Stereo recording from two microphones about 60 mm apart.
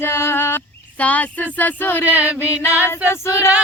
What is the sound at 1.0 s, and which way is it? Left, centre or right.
Speech, left.